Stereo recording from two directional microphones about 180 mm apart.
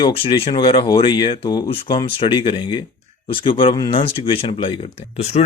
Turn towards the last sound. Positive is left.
turn(degrees=35)  # may be behind; listen again after turning